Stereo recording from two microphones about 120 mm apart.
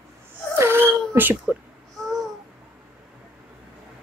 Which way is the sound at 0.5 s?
20° right (ahead or behind).